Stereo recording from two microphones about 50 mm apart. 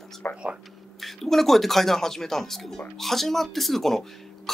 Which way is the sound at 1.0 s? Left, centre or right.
Centre.